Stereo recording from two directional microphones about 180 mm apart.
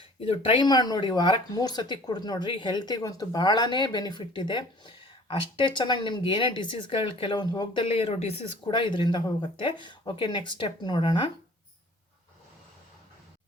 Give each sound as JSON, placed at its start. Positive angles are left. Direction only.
{"t": 0.2, "sound": "speech", "side_deg": 30}